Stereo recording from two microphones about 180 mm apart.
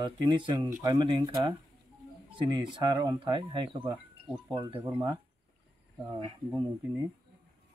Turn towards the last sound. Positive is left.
turn(degrees=-20)  # may be behind; listen again after turning